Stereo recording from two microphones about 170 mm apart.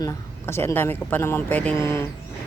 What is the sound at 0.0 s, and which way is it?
Speech, 15° left (ahead or behind).